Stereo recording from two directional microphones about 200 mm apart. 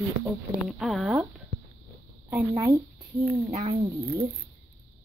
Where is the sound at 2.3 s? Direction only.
15° right (ahead or behind).